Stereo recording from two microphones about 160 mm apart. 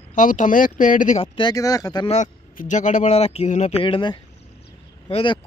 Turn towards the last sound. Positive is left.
turn(degrees=35)  # may be behind; listen again after turning